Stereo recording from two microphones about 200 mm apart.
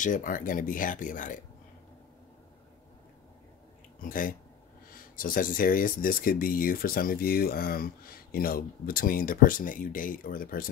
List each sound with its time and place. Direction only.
0.0 s speech: 40° left (ahead or behind)
4.0 s speech: 45° left (ahead or behind)